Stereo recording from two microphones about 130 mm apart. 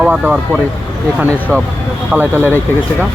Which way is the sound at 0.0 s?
10° right (ahead or behind).